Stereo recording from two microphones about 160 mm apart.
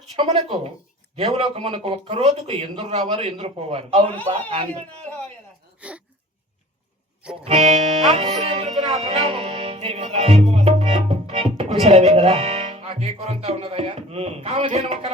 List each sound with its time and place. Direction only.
0.2 s speech: 35° right (ahead or behind)
5.8 s a sound: 10° right (ahead or behind)
7.4 s speech: 40° right (ahead or behind)
8.4 s music: 40° right (ahead or behind)
14.8 s speech: 40° right (ahead or behind)